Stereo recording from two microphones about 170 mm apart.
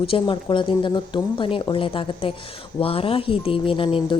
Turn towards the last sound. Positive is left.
turn(degrees=30)  # may be behind; listen again after turning